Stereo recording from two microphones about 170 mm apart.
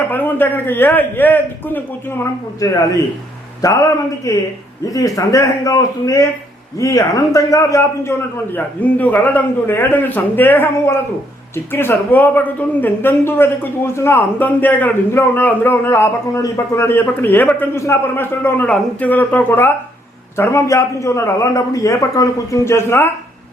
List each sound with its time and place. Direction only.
0.1 s a man's voice: 10° left (ahead or behind)